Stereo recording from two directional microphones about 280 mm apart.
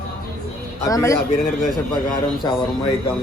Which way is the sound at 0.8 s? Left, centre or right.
Centre.